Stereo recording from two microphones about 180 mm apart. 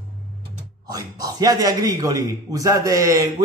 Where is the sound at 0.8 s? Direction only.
20° right (ahead or behind).